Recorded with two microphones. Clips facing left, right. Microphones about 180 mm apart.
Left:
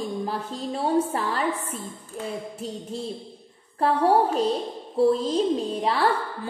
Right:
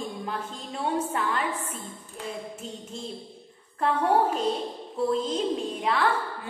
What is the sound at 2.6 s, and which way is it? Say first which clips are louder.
Speech: left 5 dB; 35° left (ahead or behind).